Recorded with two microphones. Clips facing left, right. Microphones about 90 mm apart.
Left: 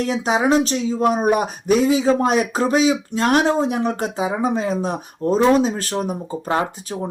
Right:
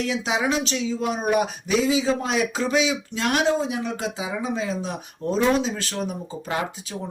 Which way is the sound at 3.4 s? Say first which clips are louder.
Left 4 dB; 55° left (ahead or behind).